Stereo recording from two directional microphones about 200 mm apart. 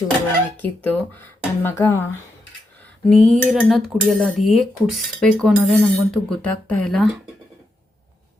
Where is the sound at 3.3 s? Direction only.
Centre (ahead or behind).